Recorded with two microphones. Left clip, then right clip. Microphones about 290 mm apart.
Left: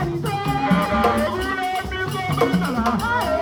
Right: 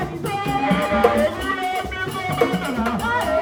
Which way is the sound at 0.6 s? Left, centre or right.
Left.